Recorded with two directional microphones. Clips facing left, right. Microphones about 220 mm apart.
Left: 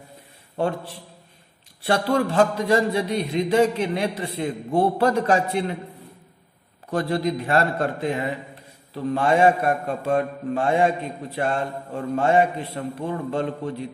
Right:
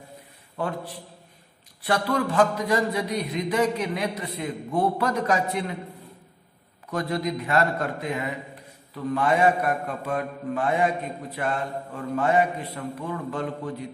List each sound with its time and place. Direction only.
0.6 s a man's voice: 25° left (ahead or behind)
6.9 s a man's voice: 30° left (ahead or behind)